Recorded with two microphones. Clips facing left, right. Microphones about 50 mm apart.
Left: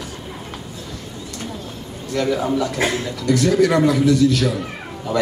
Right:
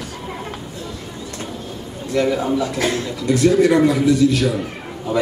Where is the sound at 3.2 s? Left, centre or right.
Right.